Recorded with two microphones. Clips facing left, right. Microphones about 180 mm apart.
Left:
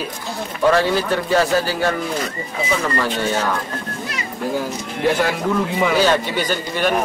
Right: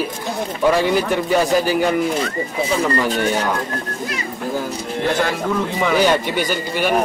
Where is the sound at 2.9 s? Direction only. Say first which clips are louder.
Right 2 dB; 15° right (ahead or behind).